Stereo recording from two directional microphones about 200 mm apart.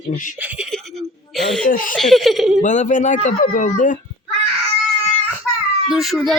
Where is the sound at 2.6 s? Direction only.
40° left (ahead or behind).